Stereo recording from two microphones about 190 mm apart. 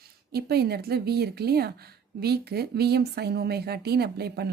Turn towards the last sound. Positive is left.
turn(degrees=-55)  # may be behind; listen again after turning